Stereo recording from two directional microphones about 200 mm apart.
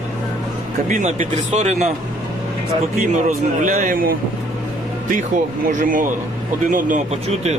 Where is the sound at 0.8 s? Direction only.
35° right (ahead or behind).